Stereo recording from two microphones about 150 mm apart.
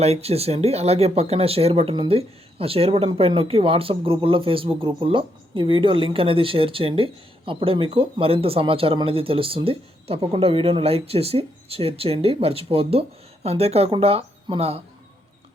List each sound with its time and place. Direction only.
0.0 s speech: 45° right (ahead or behind)